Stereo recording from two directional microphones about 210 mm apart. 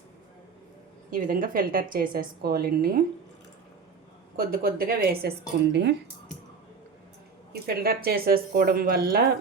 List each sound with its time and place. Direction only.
1.1 s a woman's voice: 40° right (ahead or behind)
4.4 s a woman's voice: 45° right (ahead or behind)
7.5 s a woman's voice: 45° right (ahead or behind)